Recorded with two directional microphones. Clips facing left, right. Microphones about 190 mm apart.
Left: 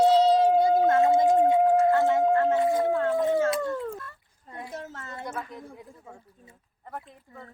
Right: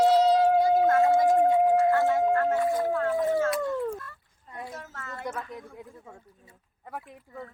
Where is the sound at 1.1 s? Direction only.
20° left (ahead or behind).